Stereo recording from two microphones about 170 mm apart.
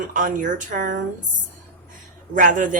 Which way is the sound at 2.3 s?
50° right (ahead or behind).